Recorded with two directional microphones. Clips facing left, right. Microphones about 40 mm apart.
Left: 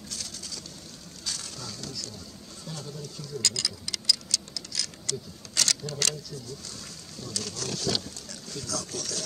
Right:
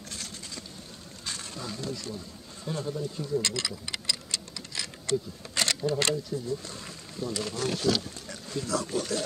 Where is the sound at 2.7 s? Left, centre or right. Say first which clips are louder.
Right 8 dB; right.